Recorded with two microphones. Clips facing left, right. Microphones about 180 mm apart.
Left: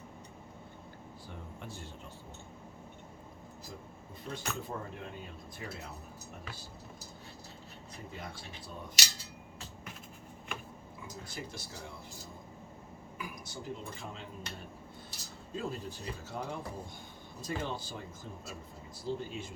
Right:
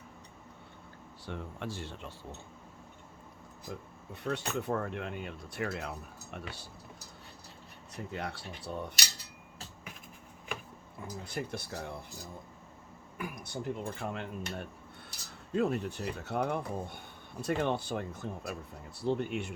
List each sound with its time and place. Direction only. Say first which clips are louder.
1.3 s speech: right 8 dB; 85° right
4.1 s speech: right 6 dB; 70° right (ahead or behind)
7.9 s speech: right 7 dB; 70° right (ahead or behind)
11.0 s cutlery: right 6 dB; 60° right (ahead or behind)
13.1 s cutlery: right 5 dB; 60° right (ahead or behind)
19.0 s speech: right 6 dB; 65° right (ahead or behind)